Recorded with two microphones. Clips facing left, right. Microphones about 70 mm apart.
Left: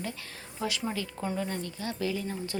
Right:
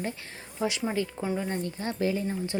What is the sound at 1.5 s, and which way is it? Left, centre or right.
Speech, right.